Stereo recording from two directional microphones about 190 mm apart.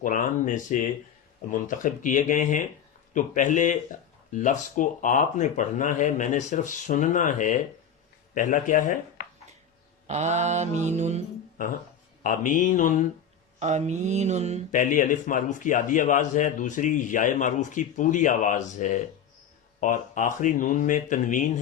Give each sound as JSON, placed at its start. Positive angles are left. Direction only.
{"t": 0.0, "sound": "a man's voice", "side_deg": 45}
{"t": 10.1, "sound": "mantra", "side_deg": -35}
{"t": 12.2, "sound": "a man's voice", "side_deg": 45}
{"t": 13.6, "sound": "mantra", "side_deg": -35}
{"t": 14.7, "sound": "a man's voice", "side_deg": 40}